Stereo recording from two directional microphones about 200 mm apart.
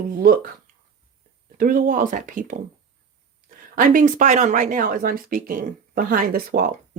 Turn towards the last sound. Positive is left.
turn(degrees=-45)  # may be behind; listen again after turning